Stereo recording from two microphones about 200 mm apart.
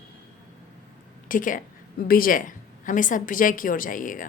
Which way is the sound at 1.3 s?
40° left (ahead or behind).